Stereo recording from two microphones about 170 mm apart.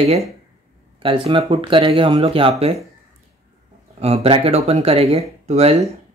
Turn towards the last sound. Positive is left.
turn(degrees=-40)  # may be behind; listen again after turning